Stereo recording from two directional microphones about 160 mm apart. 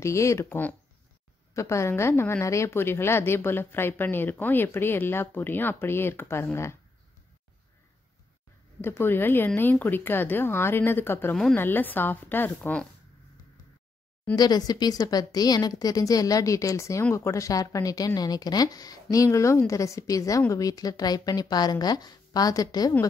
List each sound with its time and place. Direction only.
0.0 s a woman's voice: 20° left (ahead or behind)
8.8 s a woman's voice: 15° left (ahead or behind)
14.3 s speech: 25° left (ahead or behind)